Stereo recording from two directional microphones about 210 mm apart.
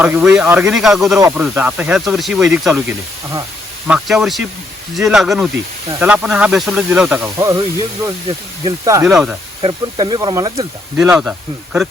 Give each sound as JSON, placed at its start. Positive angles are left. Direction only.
{"t": 0.0, "sound": "speech", "side_deg": -5}
{"t": 7.3, "sound": "speech", "side_deg": -20}
{"t": 8.6, "sound": "speech", "side_deg": -20}
{"t": 9.0, "sound": "speech", "side_deg": -5}
{"t": 9.6, "sound": "speech", "side_deg": -25}
{"t": 11.0, "sound": "speech", "side_deg": -5}